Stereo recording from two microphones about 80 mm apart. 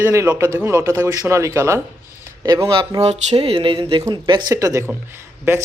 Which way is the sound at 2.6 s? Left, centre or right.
Right.